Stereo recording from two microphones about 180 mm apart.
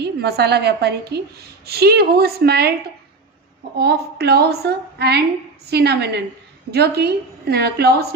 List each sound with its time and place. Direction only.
0.0 s a woman's voice: 65° right (ahead or behind)
3.8 s a woman's voice: 65° right (ahead or behind)